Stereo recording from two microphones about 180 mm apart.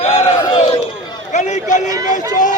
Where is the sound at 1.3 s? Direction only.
40° left (ahead or behind).